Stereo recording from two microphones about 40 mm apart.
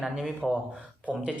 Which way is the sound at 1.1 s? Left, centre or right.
Right.